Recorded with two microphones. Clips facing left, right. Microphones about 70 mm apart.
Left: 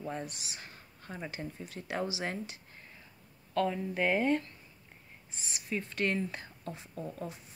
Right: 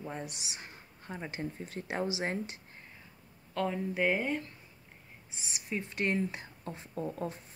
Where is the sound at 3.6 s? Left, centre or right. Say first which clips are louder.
Right 2 dB; centre.